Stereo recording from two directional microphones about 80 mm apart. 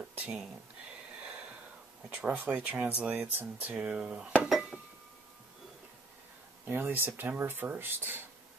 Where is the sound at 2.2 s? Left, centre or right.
Centre.